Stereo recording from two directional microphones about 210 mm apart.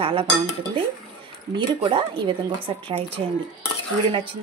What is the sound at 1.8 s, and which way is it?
Speech, 25° right (ahead or behind).